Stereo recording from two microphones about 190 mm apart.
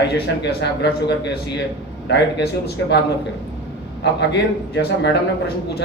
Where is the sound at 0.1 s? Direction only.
65° left (ahead or behind).